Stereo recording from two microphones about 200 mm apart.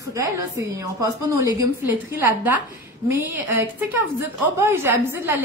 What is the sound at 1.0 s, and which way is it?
Speech, 15° right (ahead or behind).